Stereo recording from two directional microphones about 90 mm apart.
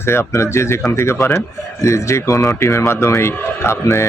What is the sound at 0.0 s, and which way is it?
Speech, 30° left (ahead or behind).